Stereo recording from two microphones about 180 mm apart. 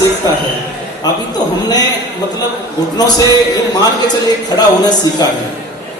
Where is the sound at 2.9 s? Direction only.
20° left (ahead or behind).